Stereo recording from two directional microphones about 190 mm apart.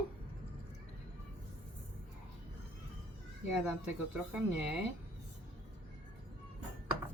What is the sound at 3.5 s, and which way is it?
Speech, 5° right (ahead or behind).